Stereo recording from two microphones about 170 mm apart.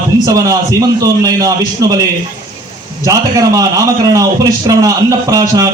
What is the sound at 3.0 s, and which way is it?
A man's voice, 20° right (ahead or behind).